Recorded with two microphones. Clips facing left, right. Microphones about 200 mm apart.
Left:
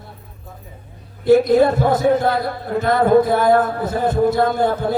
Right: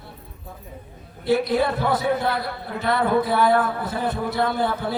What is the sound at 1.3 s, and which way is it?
A woman's voice, 45° left (ahead or behind).